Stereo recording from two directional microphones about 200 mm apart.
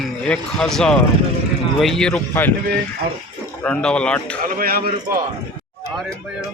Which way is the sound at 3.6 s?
5° left (ahead or behind).